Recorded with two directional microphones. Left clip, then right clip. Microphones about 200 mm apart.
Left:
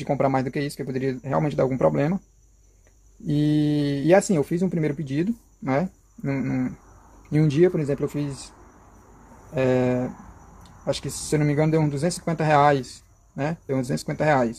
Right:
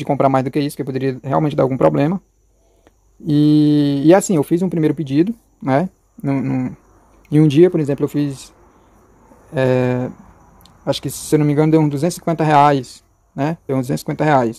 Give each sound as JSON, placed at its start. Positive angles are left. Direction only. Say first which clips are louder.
{"t": 0.0, "sound": "speech", "louder": "right 7 dB", "side_deg": -35}
{"t": 3.3, "sound": "speech", "louder": "right 9 dB", "side_deg": -40}